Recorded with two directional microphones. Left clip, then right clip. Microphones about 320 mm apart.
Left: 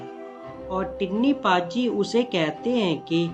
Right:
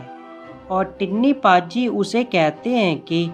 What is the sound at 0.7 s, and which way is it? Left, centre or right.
Speech, right.